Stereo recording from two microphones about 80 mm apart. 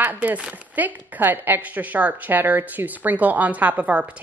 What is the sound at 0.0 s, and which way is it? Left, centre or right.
A woman's voice, right.